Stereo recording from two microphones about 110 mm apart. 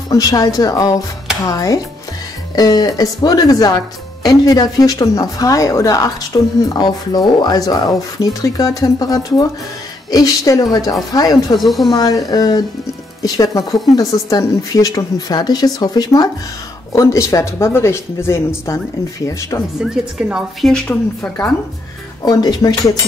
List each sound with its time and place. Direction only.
0.1 s a woman's voice: 35° left (ahead or behind)
11.5 s a woman's voice: centre (ahead or behind)
11.9 s a woman's voice: 35° left (ahead or behind)
19.8 s a woman's voice: 5° right (ahead or behind)
22.2 s a woman's voice: 35° left (ahead or behind)